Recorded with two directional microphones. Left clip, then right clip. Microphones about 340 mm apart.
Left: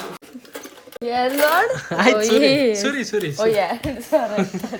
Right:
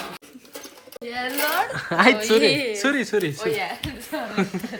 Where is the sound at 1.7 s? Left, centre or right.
Centre.